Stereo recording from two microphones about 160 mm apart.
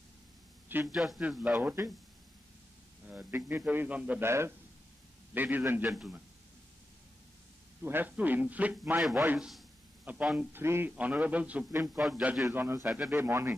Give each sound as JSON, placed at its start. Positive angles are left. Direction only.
{"t": 0.9, "sound": "a man's voice", "side_deg": 0}
{"t": 3.1, "sound": "a man's voice", "side_deg": -10}
{"t": 5.9, "sound": "a man's voice", "side_deg": -5}
{"t": 7.8, "sound": "a man's voice", "side_deg": -15}